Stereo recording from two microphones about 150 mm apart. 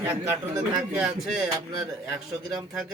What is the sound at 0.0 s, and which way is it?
Speech, 10° right (ahead or behind).